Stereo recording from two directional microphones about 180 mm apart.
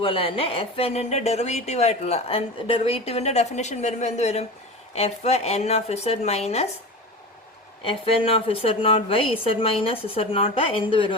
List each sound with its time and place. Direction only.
0.0 s speech: 30° left (ahead or behind)
7.9 s speech: 30° left (ahead or behind)